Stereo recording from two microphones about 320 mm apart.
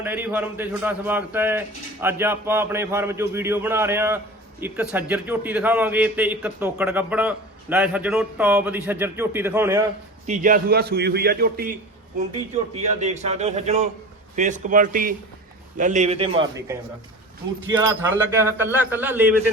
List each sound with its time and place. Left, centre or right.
0.0 s a man's voice: centre
10.2 s a man's voice: right
12.7 s a man's voice: right